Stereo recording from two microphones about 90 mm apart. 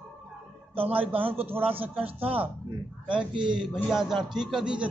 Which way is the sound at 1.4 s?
25° right (ahead or behind).